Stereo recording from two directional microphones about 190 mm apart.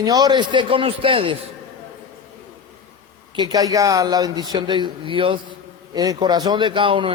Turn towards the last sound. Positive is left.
turn(degrees=-25)  # may be behind; listen again after turning